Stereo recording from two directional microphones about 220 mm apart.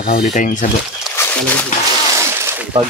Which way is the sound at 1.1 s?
5° left (ahead or behind).